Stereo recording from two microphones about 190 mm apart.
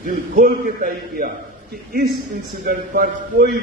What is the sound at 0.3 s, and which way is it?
Speech, 50° right (ahead or behind).